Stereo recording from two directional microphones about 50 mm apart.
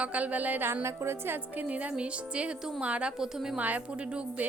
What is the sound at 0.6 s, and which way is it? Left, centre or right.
Speech, right.